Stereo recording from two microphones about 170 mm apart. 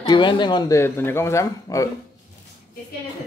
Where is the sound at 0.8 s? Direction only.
15° left (ahead or behind).